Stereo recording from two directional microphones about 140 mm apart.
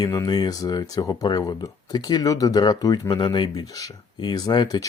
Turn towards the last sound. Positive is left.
turn(degrees=30)  # may be behind; listen again after turning